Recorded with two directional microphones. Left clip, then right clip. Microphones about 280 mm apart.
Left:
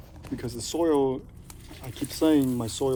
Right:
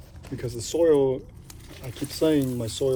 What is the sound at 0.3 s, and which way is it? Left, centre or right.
Speech, centre.